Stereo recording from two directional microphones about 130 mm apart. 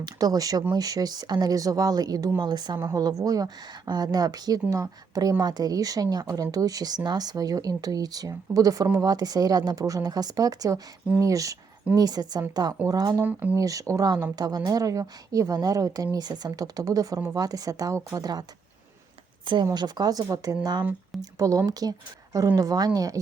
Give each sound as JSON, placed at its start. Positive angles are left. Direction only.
{"t": 0.0, "sound": "speech", "side_deg": -30}
{"t": 13.2, "sound": "speech", "side_deg": -15}
{"t": 13.6, "sound": "speech", "side_deg": -25}
{"t": 19.7, "sound": "speech", "side_deg": -30}